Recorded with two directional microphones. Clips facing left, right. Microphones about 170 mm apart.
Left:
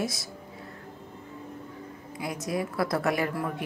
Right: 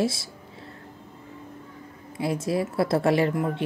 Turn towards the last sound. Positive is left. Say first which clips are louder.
# right 6 dB
turn(degrees=-25)  # may be behind; listen again after turning